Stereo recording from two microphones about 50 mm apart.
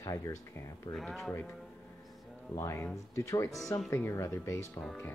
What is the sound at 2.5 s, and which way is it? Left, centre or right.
Speech, left.